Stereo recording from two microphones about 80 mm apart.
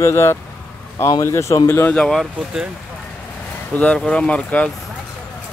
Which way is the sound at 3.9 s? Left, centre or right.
Centre.